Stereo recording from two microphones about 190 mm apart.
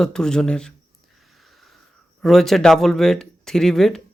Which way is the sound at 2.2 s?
Centre (ahead or behind).